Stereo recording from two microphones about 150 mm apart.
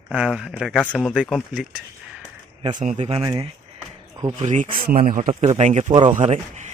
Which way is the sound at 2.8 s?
50° right (ahead or behind).